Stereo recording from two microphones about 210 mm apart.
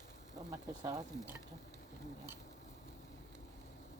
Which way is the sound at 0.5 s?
15° right (ahead or behind).